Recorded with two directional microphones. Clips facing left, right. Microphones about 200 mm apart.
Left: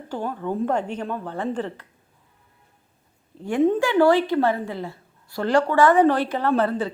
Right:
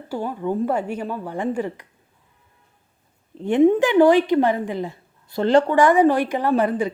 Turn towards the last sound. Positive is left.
turn(degrees=-15)  # may be behind; listen again after turning